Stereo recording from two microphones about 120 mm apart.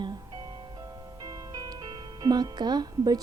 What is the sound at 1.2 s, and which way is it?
Speech, 30° right (ahead or behind).